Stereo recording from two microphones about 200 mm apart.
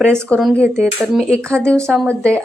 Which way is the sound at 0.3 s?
Centre (ahead or behind).